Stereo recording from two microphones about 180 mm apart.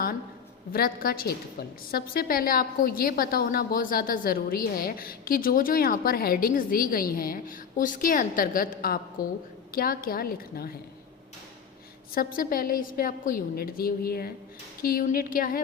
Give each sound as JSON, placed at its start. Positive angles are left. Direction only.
{"t": 0.7, "sound": "a woman's voice", "side_deg": 55}
{"t": 9.2, "sound": "a woman's voice", "side_deg": 20}
{"t": 9.7, "sound": "a woman's voice", "side_deg": 55}
{"t": 12.1, "sound": "a woman's voice", "side_deg": 55}